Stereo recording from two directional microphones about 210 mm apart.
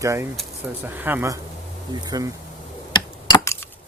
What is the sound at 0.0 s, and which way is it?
Speech, 15° right (ahead or behind).